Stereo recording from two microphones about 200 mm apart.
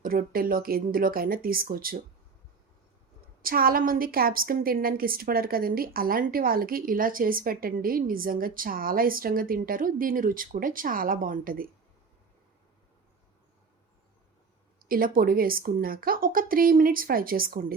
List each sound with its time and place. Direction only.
0.0 s a woman's voice: 45° right (ahead or behind)
3.4 s a woman's voice: 45° right (ahead or behind)
14.8 s a woman's voice: 45° right (ahead or behind)